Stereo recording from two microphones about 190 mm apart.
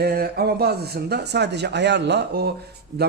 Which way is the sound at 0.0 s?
55° right (ahead or behind).